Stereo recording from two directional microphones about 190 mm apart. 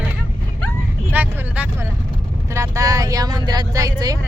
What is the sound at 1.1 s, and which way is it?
Vehicle, 10° right (ahead or behind).